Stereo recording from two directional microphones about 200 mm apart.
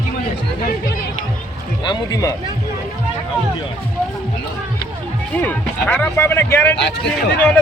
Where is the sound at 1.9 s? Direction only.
20° left (ahead or behind).